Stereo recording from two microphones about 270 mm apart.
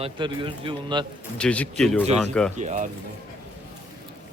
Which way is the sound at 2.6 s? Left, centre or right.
Right.